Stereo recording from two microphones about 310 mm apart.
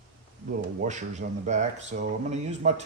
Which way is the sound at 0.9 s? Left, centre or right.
Right.